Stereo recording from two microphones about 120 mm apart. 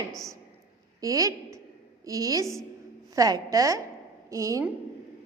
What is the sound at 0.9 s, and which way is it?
A woman's voice, 30° right (ahead or behind).